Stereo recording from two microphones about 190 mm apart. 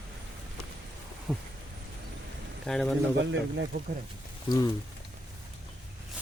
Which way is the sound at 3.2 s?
70° right (ahead or behind).